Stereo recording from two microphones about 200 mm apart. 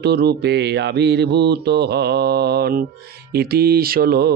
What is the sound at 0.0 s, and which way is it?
Speech, 55° right (ahead or behind).